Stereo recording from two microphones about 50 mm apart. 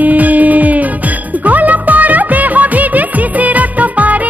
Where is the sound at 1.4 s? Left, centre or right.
Right.